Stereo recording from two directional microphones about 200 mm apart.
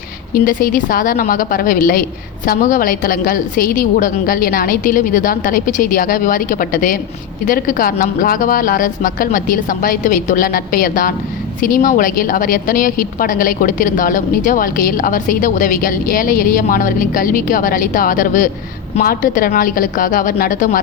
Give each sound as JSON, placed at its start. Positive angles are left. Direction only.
{"t": 0.3, "sound": "a woman's voice", "side_deg": 45}